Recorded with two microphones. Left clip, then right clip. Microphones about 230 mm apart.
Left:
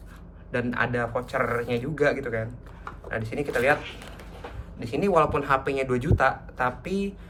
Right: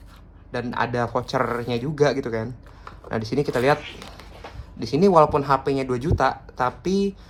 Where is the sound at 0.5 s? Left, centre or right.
Centre.